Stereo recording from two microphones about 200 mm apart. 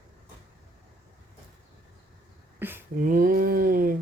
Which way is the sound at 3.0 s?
45° right (ahead or behind).